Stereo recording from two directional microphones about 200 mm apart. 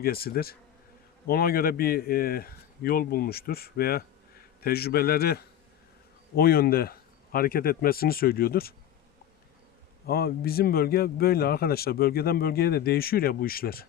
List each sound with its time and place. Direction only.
0.0 s a man's voice: 50° left (ahead or behind)
10.1 s a man's voice: 50° left (ahead or behind)